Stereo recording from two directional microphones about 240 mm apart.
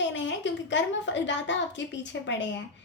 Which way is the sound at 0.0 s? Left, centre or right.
Left.